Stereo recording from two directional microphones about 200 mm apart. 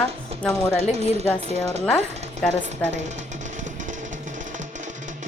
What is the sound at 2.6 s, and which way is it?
Music, 35° right (ahead or behind).